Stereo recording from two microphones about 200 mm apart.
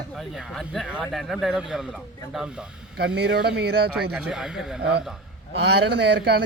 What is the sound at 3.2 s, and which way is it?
Speech, 55° right (ahead or behind).